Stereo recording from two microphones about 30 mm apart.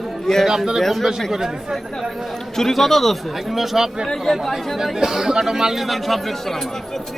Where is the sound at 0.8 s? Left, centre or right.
Centre.